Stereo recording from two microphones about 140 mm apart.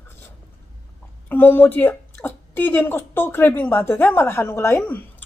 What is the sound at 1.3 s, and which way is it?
A woman's voice, 15° left (ahead or behind).